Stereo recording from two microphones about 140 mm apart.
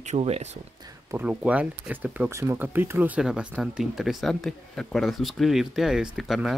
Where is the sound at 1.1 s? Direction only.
10° right (ahead or behind).